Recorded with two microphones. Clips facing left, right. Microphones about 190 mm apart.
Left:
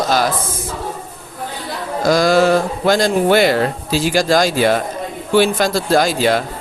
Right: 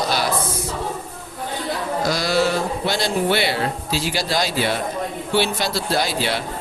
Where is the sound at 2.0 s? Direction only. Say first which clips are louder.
Left 8 dB; 50° left (ahead or behind).